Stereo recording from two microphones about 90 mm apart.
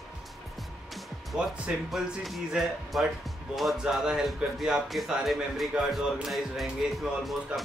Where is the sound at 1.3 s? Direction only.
5° right (ahead or behind).